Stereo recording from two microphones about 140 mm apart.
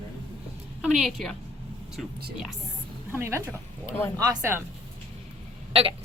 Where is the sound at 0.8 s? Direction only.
5° right (ahead or behind).